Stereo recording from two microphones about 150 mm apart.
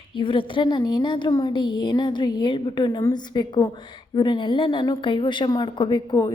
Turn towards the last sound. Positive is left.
turn(degrees=30)  # may be behind; listen again after turning